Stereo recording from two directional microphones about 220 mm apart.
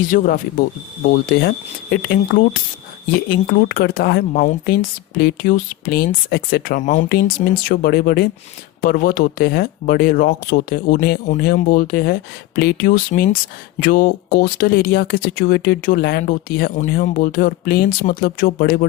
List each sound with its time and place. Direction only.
0.1 s speech: 40° left (ahead or behind)